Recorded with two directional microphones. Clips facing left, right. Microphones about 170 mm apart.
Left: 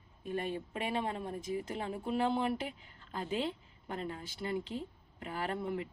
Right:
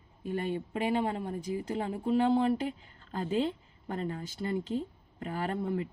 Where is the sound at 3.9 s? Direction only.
40° right (ahead or behind).